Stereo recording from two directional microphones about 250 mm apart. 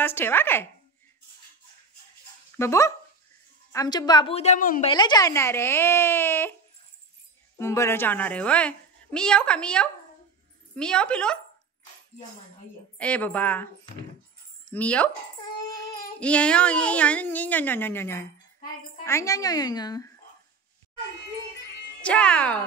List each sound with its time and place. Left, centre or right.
0.0 s speech: centre
2.5 s a woman's voice: centre; by 4.8 s left
4.8 s speech: centre
7.5 s speech: centre
12.9 s speech: centre
14.7 s speech: centre
16.2 s speech: centre
22.0 s speech: centre